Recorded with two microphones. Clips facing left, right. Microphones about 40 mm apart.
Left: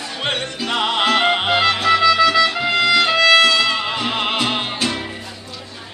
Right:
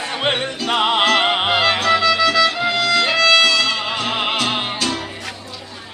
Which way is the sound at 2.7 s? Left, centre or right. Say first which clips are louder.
Left 2 dB; centre.